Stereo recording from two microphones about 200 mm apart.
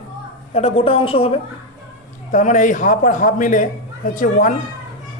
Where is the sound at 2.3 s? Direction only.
40° left (ahead or behind).